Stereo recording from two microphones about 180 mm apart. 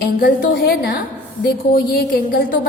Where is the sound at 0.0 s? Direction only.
55° left (ahead or behind).